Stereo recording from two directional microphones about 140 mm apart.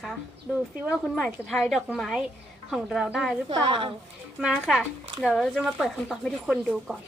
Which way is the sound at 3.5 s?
35° right (ahead or behind).